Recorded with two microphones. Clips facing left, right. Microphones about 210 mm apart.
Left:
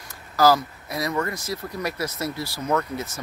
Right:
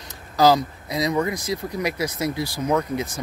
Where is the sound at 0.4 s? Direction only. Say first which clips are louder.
Right 2 dB; 20° right (ahead or behind).